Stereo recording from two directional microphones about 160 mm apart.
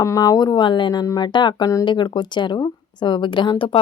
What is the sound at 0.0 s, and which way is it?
Speech, 20° left (ahead or behind).